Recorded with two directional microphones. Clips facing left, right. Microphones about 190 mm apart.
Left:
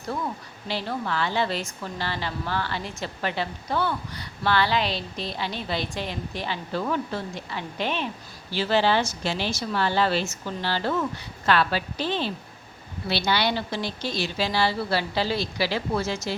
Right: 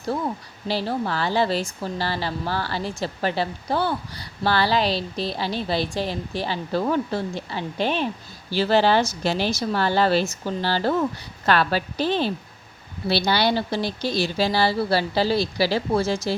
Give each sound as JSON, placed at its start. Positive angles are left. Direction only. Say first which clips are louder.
{"t": 0.7, "sound": "a woman's voice", "louder": "right 4 dB", "side_deg": -35}